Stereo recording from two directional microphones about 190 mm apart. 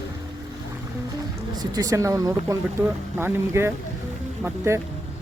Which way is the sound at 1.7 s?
20° right (ahead or behind).